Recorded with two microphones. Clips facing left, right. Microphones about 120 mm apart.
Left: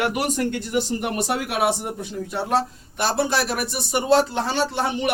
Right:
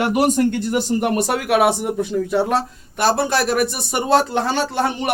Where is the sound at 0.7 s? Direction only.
50° right (ahead or behind).